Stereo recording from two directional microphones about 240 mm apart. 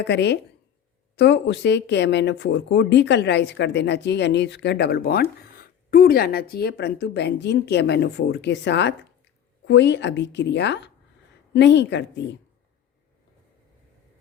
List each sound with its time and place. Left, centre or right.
0.0 s speech: left